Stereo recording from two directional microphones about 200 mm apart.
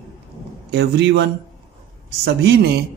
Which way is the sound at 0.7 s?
55° right (ahead or behind).